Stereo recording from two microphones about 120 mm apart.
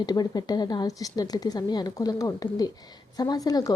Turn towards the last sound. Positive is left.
turn(degrees=30)  # may be behind; listen again after turning